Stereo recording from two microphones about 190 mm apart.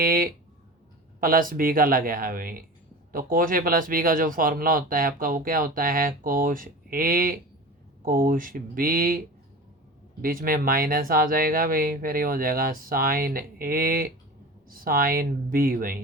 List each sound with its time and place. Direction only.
0.0 s speech: 50° right (ahead or behind)